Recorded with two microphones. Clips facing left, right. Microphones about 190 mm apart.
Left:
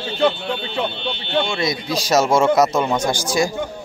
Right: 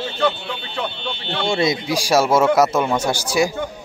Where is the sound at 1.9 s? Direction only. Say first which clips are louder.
Left 2 dB; 10° right (ahead or behind).